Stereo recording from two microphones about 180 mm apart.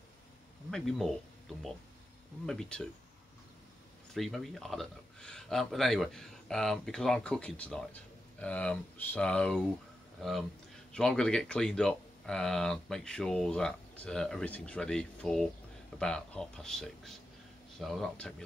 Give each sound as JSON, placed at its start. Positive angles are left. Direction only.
{"t": 0.7, "sound": "speech", "side_deg": 0}
{"t": 2.4, "sound": "speech", "side_deg": 5}
{"t": 4.1, "sound": "speech", "side_deg": 0}
{"t": 10.9, "sound": "speech", "side_deg": 5}